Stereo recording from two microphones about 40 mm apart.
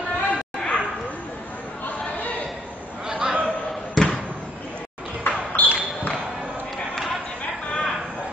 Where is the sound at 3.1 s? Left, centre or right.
Right.